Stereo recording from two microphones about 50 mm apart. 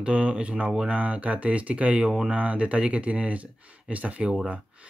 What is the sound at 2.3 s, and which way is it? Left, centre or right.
Speech, right.